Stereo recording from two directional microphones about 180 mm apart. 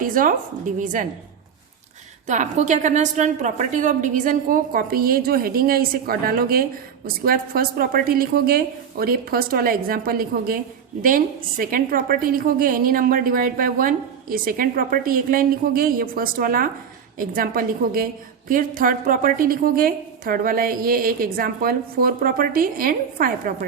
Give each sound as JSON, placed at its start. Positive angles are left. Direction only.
{"t": 0.0, "sound": "a woman's voice", "side_deg": -50}
{"t": 2.2, "sound": "a woman's voice", "side_deg": -40}